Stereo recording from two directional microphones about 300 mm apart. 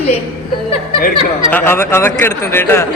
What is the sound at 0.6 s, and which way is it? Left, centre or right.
A man's voice, centre.